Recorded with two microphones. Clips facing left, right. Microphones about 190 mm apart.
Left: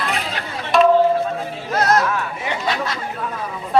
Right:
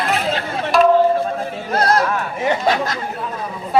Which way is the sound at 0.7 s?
Centre (ahead or behind).